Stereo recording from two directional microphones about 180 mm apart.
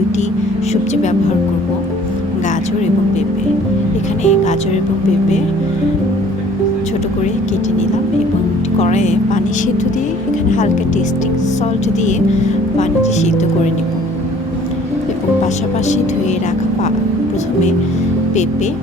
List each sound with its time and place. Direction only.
4.2 s speech: 40° left (ahead or behind)
8.8 s speech: 40° left (ahead or behind)